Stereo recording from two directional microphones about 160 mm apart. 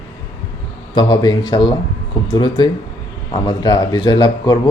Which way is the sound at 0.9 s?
25° left (ahead or behind).